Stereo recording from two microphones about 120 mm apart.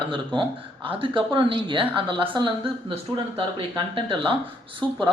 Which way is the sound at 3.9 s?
50° right (ahead or behind).